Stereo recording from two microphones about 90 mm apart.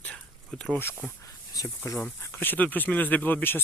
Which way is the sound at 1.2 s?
40° left (ahead or behind).